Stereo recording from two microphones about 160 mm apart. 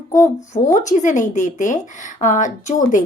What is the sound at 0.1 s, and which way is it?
A woman's voice, 50° left (ahead or behind).